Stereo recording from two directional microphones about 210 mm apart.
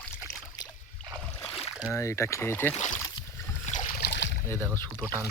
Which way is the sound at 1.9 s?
15° left (ahead or behind).